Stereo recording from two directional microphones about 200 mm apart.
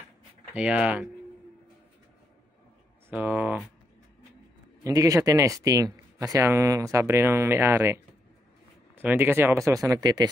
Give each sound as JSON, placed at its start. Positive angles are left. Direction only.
{"t": 0.6, "sound": "speech", "side_deg": -5}
{"t": 3.1, "sound": "speech", "side_deg": -10}
{"t": 4.8, "sound": "speech", "side_deg": -15}
{"t": 9.0, "sound": "speech", "side_deg": -10}